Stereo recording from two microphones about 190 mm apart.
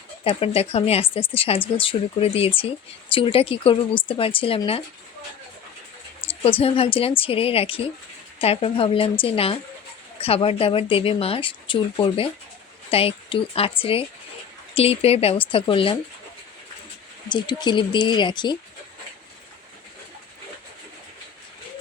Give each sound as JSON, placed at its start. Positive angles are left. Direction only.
{"t": 0.3, "sound": "speech", "side_deg": 30}
{"t": 6.2, "sound": "speech", "side_deg": 30}
{"t": 17.2, "sound": "speech", "side_deg": 25}